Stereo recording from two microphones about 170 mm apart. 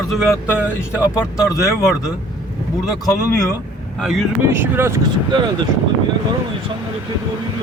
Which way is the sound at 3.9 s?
Centre (ahead or behind).